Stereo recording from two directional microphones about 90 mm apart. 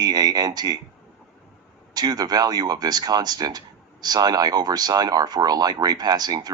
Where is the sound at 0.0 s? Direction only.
45° right (ahead or behind).